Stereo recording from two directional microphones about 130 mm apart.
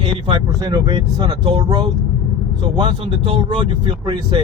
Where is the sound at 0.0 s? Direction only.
35° right (ahead or behind).